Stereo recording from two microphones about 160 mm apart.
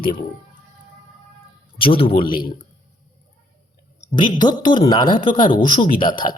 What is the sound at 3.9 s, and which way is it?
Speech, 25° left (ahead or behind).